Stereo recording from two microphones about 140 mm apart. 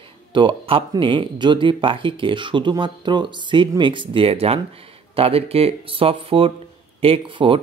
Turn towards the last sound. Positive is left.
turn(degrees=-40)  # may be behind; listen again after turning